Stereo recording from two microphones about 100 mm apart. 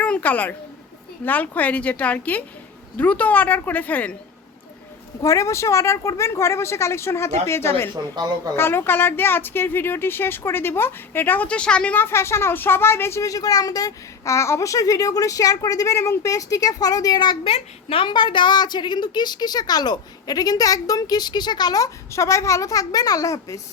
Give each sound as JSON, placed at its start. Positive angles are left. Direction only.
{"t": 0.0, "sound": "a woman's voice", "side_deg": 15}
{"t": 5.2, "sound": "speech", "side_deg": 30}
{"t": 8.0, "sound": "a woman's voice", "side_deg": -40}
{"t": 8.5, "sound": "speech", "side_deg": 25}
{"t": 11.9, "sound": "a woman's voice", "side_deg": 25}
{"t": 17.4, "sound": "a woman's voice", "side_deg": 75}